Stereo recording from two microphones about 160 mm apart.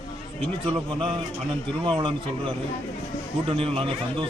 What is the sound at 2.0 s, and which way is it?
A man's voice, 30° right (ahead or behind).